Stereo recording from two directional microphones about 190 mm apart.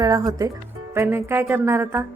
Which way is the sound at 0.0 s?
20° right (ahead or behind).